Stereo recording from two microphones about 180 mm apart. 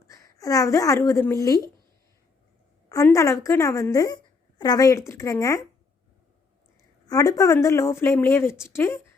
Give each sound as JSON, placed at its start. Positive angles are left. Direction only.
{"t": 0.1, "sound": "a woman's voice", "side_deg": 20}
{"t": 2.9, "sound": "a woman's voice", "side_deg": 15}
{"t": 7.1, "sound": "a woman's voice", "side_deg": 20}